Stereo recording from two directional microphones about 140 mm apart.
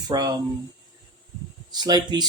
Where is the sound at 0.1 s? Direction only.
30° right (ahead or behind).